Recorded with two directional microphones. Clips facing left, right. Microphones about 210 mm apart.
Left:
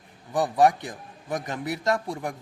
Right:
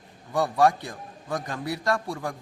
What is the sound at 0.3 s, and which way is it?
A man's voice, 20° left (ahead or behind).